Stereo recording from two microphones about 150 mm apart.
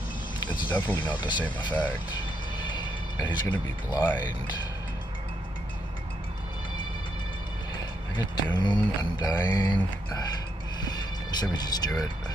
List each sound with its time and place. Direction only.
0.7 s speech: 10° left (ahead or behind)
0.9 s speech: 30° left (ahead or behind)
1.7 s speech: 10° left (ahead or behind)
2.6 s a sound: 30° left (ahead or behind)
8.2 s speech: 30° left (ahead or behind)
11.5 s speech: 25° left (ahead or behind)